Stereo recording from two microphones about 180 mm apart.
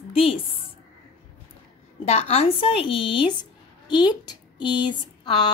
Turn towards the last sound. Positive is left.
turn(degrees=25)  # may be behind; listen again after turning